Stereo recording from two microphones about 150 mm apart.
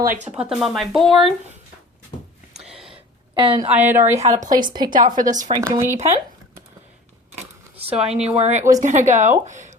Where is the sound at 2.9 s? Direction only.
35° right (ahead or behind).